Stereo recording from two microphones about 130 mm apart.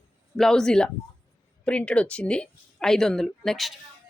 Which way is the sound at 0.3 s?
5° left (ahead or behind).